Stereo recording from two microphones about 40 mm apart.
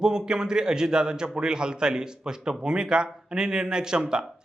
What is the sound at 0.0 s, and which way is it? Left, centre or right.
Speech, centre.